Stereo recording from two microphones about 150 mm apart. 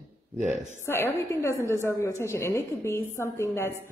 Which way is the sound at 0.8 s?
15° left (ahead or behind).